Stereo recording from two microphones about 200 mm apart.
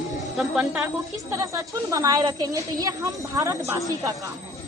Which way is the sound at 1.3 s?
15° right (ahead or behind).